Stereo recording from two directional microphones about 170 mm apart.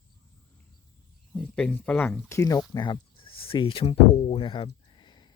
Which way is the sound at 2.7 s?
25° left (ahead or behind).